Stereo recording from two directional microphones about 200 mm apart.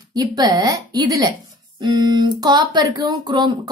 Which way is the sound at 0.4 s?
20° right (ahead or behind).